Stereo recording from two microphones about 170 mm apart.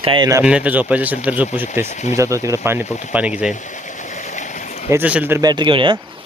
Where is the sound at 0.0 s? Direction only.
30° right (ahead or behind).